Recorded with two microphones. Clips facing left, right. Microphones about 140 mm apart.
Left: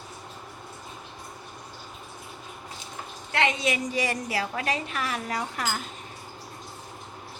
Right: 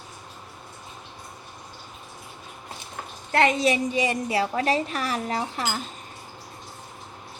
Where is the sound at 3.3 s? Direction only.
40° right (ahead or behind).